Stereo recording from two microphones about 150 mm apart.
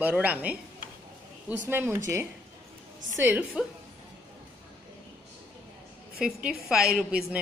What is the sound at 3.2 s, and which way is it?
Speech, 10° right (ahead or behind).